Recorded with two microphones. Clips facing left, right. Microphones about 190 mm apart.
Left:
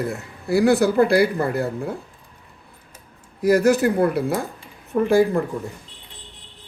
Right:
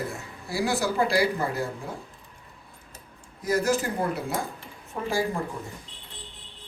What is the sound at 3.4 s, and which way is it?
A man's voice, 65° left (ahead or behind).